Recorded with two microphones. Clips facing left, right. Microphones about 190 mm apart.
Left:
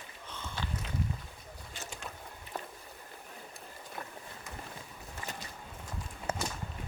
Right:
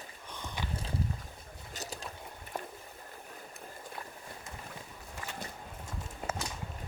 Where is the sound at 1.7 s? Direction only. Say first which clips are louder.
Right 3 dB; 35° right (ahead or behind).